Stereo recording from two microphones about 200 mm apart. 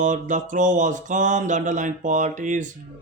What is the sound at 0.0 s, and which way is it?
Speech, 40° right (ahead or behind).